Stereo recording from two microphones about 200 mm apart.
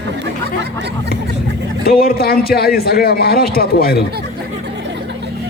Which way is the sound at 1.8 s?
50° left (ahead or behind).